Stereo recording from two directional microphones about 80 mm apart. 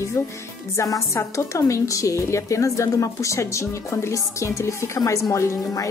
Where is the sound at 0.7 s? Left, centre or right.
Left.